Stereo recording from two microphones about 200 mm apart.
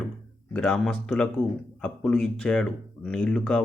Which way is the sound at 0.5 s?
5° left (ahead or behind).